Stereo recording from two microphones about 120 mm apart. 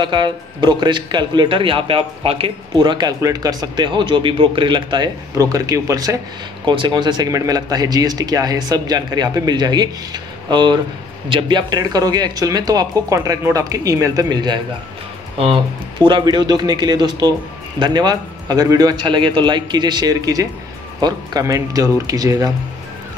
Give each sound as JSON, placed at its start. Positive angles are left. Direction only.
{"t": 0.0, "sound": "speech", "side_deg": -40}
{"t": 5.4, "sound": "speech", "side_deg": -30}
{"t": 15.3, "sound": "speech", "side_deg": -45}